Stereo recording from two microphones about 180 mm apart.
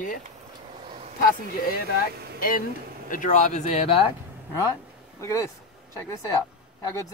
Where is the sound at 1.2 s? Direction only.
55° left (ahead or behind); by 4.0 s 35° left (ahead or behind).